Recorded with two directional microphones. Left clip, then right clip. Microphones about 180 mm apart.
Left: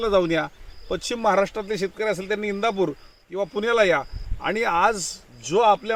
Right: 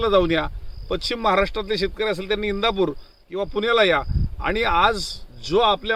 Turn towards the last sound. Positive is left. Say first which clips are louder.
# even
turn(degrees=-5)  # may be behind; listen again after turning